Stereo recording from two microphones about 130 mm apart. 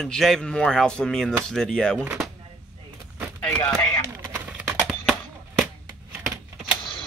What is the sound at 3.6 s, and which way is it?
Speech, 15° left (ahead or behind).